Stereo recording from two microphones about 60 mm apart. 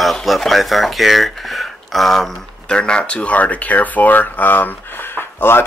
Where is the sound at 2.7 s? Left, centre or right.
Centre.